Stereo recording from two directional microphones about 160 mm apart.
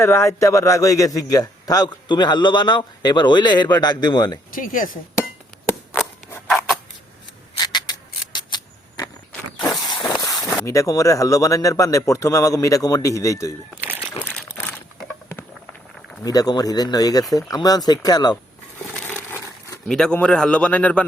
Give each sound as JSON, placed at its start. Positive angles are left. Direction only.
{"t": 0.0, "sound": "a man's voice", "side_deg": 15}
{"t": 4.5, "sound": "speech", "side_deg": 60}
{"t": 7.6, "sound": "scrape", "side_deg": 25}
{"t": 9.6, "sound": "vehicle", "side_deg": 25}
{"t": 10.1, "sound": "a sound", "side_deg": 20}
{"t": 10.7, "sound": "a man's voice", "side_deg": 20}
{"t": 13.8, "sound": "crumpling", "side_deg": -10}
{"t": 14.2, "sound": "a sound", "side_deg": 10}
{"t": 16.2, "sound": "a man's voice", "side_deg": 25}
{"t": 18.9, "sound": "crumpling", "side_deg": 10}
{"t": 19.9, "sound": "a man's voice", "side_deg": 5}